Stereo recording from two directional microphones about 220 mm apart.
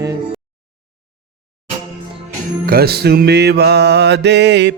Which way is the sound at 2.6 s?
45° right (ahead or behind).